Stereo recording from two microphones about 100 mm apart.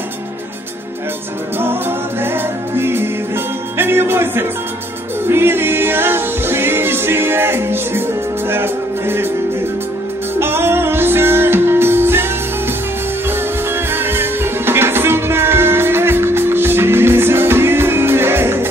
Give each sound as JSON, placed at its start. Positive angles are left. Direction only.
{"t": 1.6, "sound": "music", "side_deg": -20}
{"t": 10.4, "sound": "music", "side_deg": -25}
{"t": 13.9, "sound": "music", "side_deg": -25}